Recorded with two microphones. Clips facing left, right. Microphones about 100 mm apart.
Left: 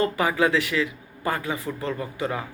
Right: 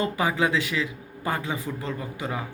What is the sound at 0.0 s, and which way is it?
A man's voice, 20° right (ahead or behind).